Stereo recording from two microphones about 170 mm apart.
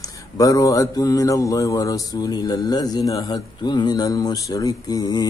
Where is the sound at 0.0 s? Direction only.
20° left (ahead or behind).